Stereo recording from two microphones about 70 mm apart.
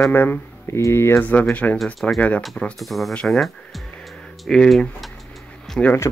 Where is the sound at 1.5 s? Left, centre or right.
Left.